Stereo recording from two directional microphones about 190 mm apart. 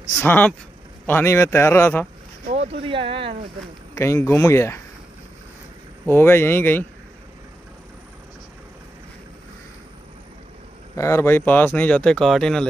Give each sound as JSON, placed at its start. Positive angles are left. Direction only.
{"t": 0.2, "sound": "speech", "side_deg": 10}
{"t": 2.4, "sound": "speech", "side_deg": -35}
{"t": 3.9, "sound": "speech", "side_deg": 15}
{"t": 6.0, "sound": "speech", "side_deg": 10}
{"t": 11.0, "sound": "speech", "side_deg": 15}